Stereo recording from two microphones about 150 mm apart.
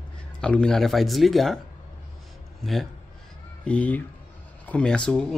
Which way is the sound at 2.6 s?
Centre (ahead or behind).